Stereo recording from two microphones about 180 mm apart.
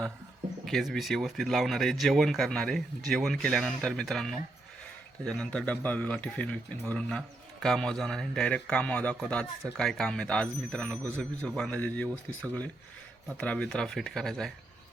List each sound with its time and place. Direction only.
0.6 s speech: centre (ahead or behind)